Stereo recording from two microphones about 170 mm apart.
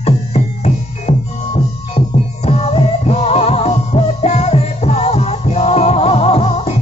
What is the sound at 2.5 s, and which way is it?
Music, 40° left (ahead or behind).